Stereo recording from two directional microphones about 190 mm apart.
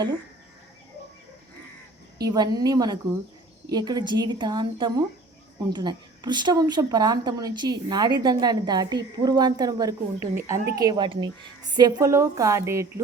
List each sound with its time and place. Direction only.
2.2 s a woman's voice: 20° right (ahead or behind)